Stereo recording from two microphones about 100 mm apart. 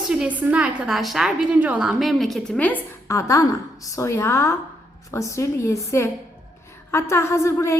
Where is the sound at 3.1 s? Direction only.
30° left (ahead or behind).